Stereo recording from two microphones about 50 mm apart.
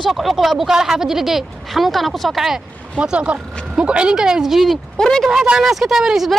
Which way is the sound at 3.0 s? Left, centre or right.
Right.